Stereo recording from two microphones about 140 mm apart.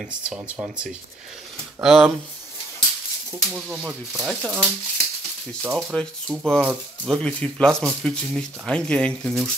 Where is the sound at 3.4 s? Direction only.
Centre (ahead or behind).